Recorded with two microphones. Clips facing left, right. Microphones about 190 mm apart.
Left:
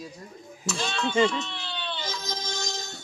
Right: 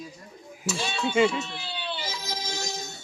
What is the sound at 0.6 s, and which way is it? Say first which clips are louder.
Speech: even; 5° right (ahead or behind).